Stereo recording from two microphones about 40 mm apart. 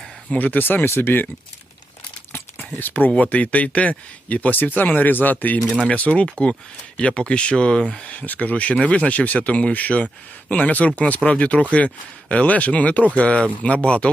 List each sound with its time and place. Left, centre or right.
0.3 s speech: left
2.7 s speech: left
5.9 s speech: left
6.2 s speech: centre
8.1 s speech: left